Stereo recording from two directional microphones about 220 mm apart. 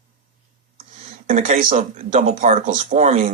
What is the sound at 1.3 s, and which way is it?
Speech, 35° right (ahead or behind).